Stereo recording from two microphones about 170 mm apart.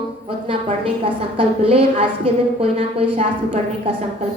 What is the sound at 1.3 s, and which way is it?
A woman's voice, 35° right (ahead or behind).